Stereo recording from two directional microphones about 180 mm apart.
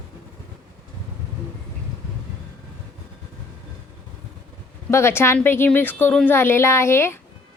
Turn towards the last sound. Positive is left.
turn(degrees=15)  # may be behind; listen again after turning